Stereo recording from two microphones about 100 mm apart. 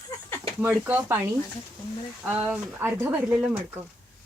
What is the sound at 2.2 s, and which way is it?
Speech, 10° right (ahead or behind).